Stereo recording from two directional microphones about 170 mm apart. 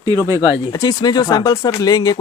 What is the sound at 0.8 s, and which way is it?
Speech, 25° left (ahead or behind).